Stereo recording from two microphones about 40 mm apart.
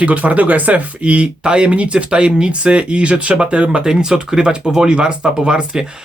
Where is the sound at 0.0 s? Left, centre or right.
Right.